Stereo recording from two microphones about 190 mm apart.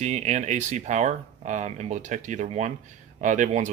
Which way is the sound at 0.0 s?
35° right (ahead or behind).